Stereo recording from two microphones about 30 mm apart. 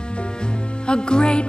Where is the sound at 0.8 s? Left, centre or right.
Left.